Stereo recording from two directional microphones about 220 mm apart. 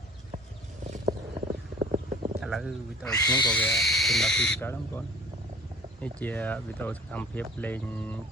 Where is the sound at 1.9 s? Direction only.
25° right (ahead or behind).